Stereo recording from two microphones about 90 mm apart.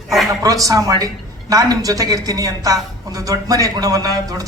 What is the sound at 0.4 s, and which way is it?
A woman's voice, 40° right (ahead or behind).